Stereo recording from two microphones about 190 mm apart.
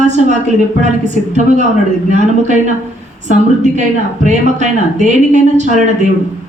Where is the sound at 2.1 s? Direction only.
40° right (ahead or behind).